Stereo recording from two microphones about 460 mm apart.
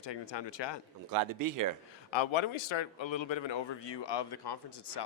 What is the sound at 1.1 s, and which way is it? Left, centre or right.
Speech, right.